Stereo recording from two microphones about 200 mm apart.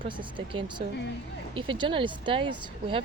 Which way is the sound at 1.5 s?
25° right (ahead or behind).